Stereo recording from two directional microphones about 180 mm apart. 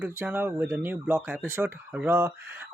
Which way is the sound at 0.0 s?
10° right (ahead or behind).